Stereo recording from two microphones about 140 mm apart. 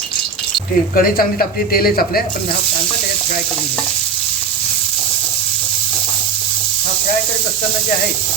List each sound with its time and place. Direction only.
0.9 s speech: 90° left